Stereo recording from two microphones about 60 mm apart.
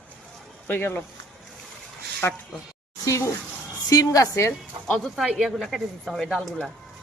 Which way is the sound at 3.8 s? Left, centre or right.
Left.